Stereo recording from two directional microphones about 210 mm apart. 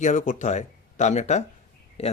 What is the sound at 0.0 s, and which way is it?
Speech, 35° left (ahead or behind).